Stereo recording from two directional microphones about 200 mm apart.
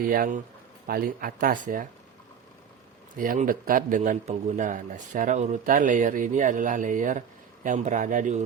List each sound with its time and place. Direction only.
0.1 s speech: 40° right (ahead or behind)
3.2 s a man's voice: 45° right (ahead or behind)